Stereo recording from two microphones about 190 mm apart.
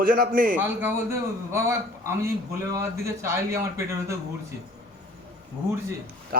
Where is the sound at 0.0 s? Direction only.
50° right (ahead or behind).